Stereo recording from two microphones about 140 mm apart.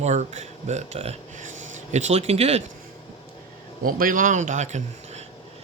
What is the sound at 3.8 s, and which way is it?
Speech, 80° right.